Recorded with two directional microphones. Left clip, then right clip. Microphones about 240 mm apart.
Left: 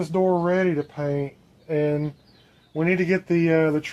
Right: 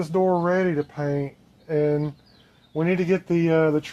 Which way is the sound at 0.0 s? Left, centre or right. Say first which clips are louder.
Even; centre.